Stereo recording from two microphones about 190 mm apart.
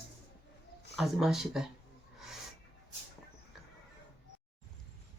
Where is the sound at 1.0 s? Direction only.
Centre (ahead or behind).